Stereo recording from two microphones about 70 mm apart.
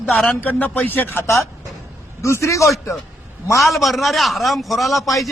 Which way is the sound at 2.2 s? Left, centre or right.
Left.